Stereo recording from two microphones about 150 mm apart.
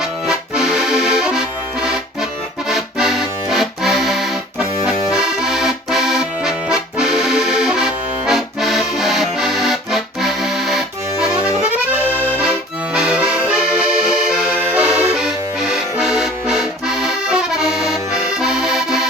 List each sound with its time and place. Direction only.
0.3 s accordion: 5° right (ahead or behind)
2.6 s accordion: centre (ahead or behind)
12.9 s accordion: 5° right (ahead or behind)